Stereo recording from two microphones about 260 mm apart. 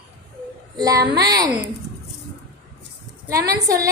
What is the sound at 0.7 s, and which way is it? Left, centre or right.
Speech, centre.